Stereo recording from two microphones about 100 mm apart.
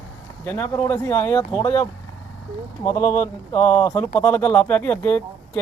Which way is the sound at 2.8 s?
35° left (ahead or behind).